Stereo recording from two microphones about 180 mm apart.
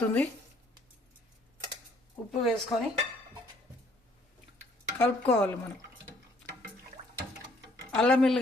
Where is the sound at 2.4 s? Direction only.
Centre (ahead or behind).